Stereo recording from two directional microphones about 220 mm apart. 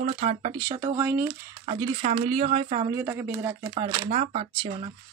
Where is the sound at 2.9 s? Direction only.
10° right (ahead or behind).